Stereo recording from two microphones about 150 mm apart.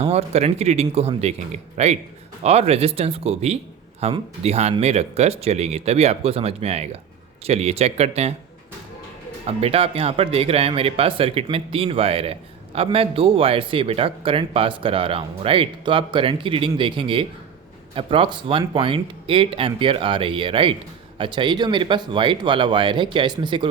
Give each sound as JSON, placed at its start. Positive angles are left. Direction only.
{"t": 0.0, "sound": "speech", "side_deg": -45}
{"t": 9.5, "sound": "speech", "side_deg": -40}